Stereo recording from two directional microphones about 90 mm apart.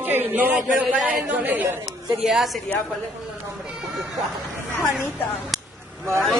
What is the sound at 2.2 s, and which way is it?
Speech, 5° right (ahead or behind).